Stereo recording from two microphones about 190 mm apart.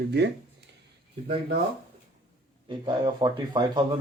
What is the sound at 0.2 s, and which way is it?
Speech, 60° right (ahead or behind).